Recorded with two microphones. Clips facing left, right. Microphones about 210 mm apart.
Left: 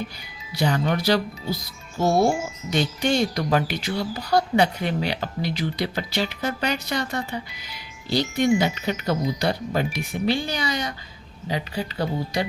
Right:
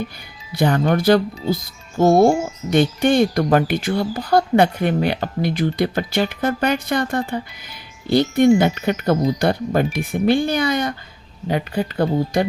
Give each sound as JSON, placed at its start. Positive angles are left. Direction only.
{"t": 0.5, "sound": "speech", "side_deg": -50}